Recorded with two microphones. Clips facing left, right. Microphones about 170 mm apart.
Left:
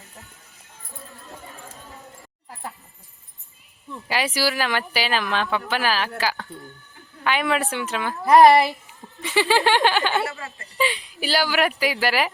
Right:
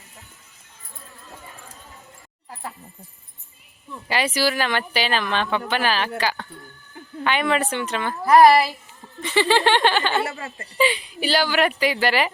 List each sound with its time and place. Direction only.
4.1 s speech: 5° left (ahead or behind)
8.2 s speech: 20° left (ahead or behind)
9.0 s speech: centre (ahead or behind)
10.3 s a woman's voice: 40° right (ahead or behind)
10.8 s speech: centre (ahead or behind)